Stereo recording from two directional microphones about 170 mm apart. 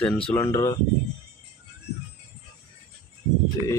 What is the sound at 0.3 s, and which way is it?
Speech, 15° left (ahead or behind).